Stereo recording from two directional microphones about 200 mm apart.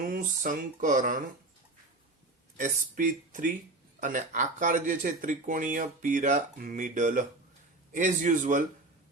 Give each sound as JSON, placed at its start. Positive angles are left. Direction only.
{"t": 0.1, "sound": "speech", "side_deg": -40}
{"t": 2.6, "sound": "speech", "side_deg": -40}